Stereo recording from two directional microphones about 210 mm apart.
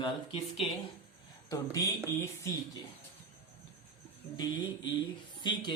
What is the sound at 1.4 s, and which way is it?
Speech, 15° left (ahead or behind).